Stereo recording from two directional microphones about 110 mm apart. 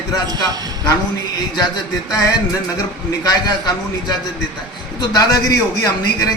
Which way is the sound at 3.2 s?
40° left (ahead or behind).